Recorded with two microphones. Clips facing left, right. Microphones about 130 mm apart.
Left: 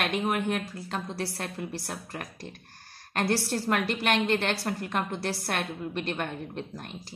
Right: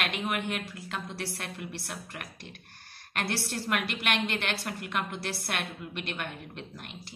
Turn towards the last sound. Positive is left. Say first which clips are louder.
# left 5 dB
turn(degrees=40)  # may be behind; listen again after turning